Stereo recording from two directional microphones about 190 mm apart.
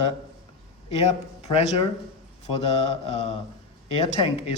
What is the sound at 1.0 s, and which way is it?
Speech, 35° left (ahead or behind).